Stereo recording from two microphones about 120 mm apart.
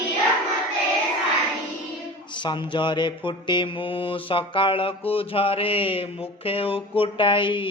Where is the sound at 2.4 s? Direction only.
40° left (ahead or behind).